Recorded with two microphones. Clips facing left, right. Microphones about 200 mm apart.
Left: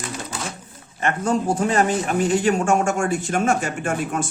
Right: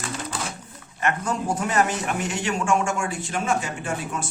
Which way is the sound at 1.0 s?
30° left (ahead or behind).